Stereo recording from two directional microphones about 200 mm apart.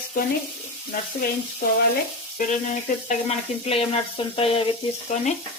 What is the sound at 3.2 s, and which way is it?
Frying, 30° left (ahead or behind).